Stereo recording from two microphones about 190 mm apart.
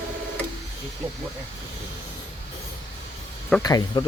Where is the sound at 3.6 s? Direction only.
20° left (ahead or behind).